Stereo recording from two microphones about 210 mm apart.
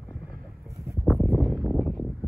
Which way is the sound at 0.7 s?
15° right (ahead or behind).